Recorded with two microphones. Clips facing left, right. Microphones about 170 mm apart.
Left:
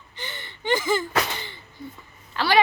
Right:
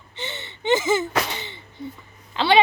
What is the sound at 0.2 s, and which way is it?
Gasp, 25° right (ahead or behind).